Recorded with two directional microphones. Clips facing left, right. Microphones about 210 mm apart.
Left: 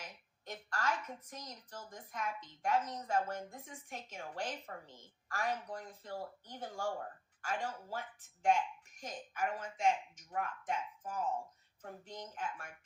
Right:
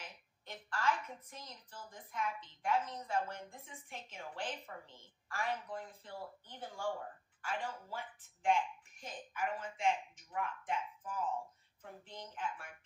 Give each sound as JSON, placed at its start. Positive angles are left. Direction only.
{"t": 0.0, "sound": "a woman's voice", "side_deg": 45}